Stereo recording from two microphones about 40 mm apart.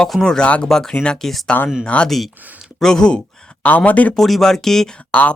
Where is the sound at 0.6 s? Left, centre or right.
Centre.